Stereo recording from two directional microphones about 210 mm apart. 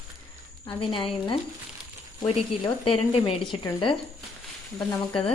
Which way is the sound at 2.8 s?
30° left (ahead or behind).